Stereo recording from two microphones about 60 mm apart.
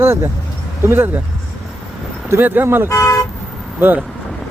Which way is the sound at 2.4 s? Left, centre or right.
Right.